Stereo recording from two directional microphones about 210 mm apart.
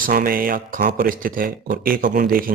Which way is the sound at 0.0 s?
45° right (ahead or behind).